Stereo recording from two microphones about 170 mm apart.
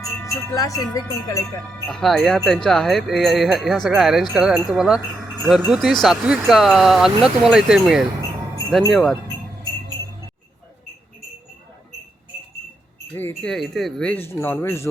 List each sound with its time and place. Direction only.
0.2 s wind chime: 20° left (ahead or behind)
1.9 s speech: centre (ahead or behind)
13.1 s speech: 10° left (ahead or behind)